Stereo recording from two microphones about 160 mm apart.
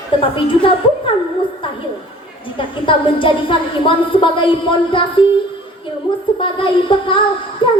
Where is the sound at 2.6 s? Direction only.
30° left (ahead or behind).